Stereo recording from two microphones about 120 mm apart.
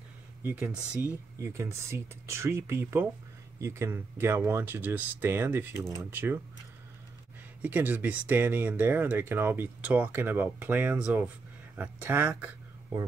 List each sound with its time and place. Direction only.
0.4 s speech: 15° right (ahead or behind)
7.6 s speech: 15° right (ahead or behind)